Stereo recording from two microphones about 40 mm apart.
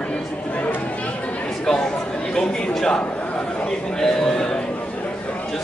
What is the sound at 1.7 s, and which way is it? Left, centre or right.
Chatter, centre.